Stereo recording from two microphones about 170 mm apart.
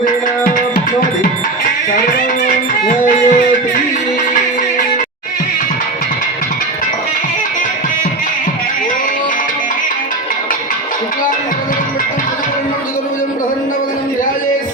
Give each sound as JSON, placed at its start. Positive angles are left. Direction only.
{"t": 2.8, "sound": "music", "side_deg": 50}